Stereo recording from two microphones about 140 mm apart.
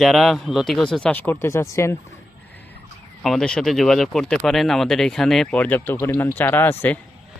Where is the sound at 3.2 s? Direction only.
5° left (ahead or behind).